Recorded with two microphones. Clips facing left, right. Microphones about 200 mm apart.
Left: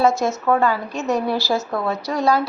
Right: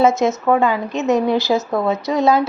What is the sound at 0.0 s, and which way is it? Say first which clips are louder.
A woman's voice: right 3 dB; 20° right (ahead or behind).